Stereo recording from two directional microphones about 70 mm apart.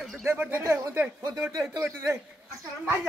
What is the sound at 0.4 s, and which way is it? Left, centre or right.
Speech, right.